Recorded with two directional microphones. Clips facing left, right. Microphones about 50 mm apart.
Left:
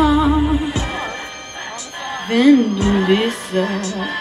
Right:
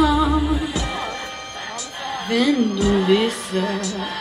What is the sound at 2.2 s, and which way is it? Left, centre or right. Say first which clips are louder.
Speech: left 7 dB; left.